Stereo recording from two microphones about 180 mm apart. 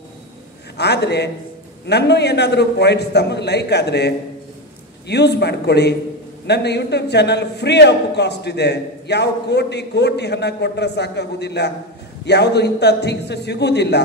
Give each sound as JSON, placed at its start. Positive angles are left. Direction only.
{"t": 0.7, "sound": "a man's voice", "side_deg": 70}